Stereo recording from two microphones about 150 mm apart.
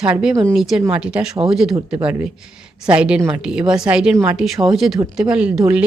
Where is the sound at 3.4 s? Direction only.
5° right (ahead or behind).